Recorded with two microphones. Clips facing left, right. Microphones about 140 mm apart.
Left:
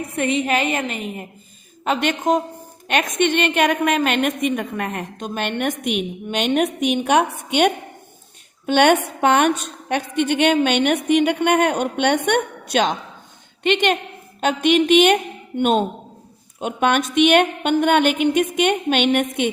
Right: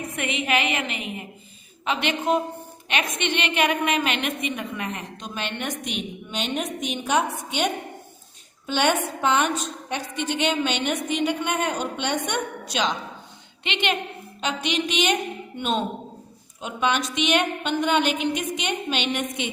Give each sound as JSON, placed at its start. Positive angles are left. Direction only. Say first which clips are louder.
{"t": 0.2, "sound": "a woman's voice", "louder": "left 5 dB", "side_deg": 35}